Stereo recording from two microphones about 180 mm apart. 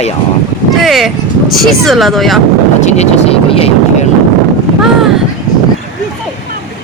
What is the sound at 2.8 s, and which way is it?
Speech, 40° left (ahead or behind).